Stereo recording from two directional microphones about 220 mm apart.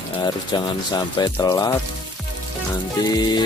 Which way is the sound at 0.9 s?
20° left (ahead or behind).